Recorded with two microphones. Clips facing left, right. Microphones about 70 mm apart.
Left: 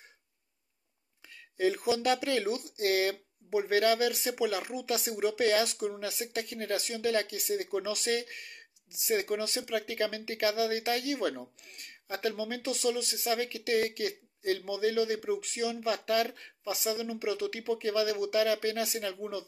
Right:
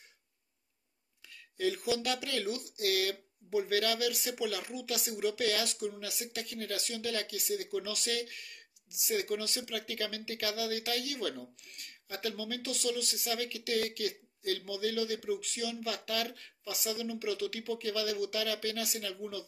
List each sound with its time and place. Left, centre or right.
1.3 s speech: left